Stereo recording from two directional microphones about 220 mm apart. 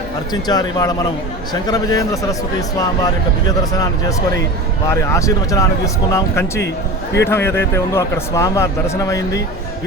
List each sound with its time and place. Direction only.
0.4 s speech: 20° left (ahead or behind)
4.9 s speech: 15° left (ahead or behind)